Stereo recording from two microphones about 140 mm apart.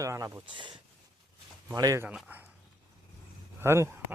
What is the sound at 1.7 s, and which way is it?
Speech, 25° right (ahead or behind).